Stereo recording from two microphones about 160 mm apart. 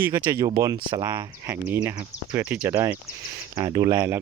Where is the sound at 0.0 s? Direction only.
15° right (ahead or behind).